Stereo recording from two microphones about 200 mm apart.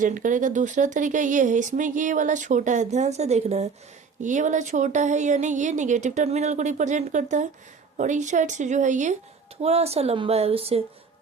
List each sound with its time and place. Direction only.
0.0 s speech: 40° right (ahead or behind)